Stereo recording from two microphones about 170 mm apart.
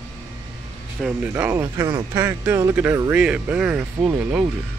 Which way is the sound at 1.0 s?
10° right (ahead or behind).